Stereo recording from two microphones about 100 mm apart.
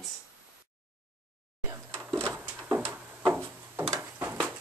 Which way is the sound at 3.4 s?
25° right (ahead or behind).